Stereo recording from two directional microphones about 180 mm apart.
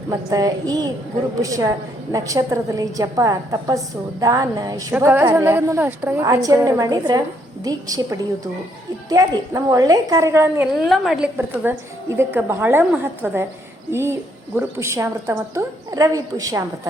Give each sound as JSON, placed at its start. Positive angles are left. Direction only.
{"t": 0.1, "sound": "a woman's voice", "side_deg": -20}
{"t": 10.8, "sound": "a woman's voice", "side_deg": 0}